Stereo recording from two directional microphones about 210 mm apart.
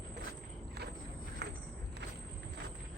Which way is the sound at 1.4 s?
55° right (ahead or behind).